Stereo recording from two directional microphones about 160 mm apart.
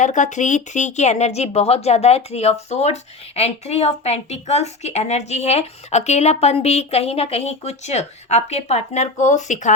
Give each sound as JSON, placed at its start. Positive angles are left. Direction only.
{"t": 0.0, "sound": "speech", "side_deg": 50}